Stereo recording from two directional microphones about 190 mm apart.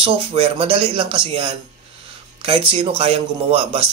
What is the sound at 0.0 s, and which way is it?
A man's voice, 30° right (ahead or behind).